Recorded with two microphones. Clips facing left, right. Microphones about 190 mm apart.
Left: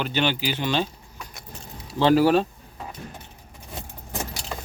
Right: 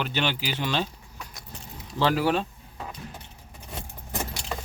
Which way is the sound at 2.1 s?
40° left (ahead or behind).